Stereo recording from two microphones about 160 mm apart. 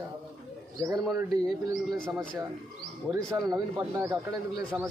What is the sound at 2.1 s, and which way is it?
Speech, 20° right (ahead or behind).